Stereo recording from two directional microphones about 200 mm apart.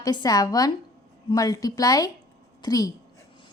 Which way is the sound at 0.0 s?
20° left (ahead or behind).